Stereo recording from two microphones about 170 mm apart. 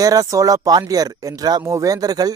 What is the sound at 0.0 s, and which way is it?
A man's voice, 20° right (ahead or behind).